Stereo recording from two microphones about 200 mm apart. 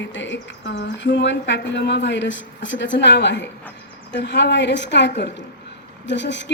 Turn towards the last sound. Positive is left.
turn(degrees=60)  # may be behind; listen again after turning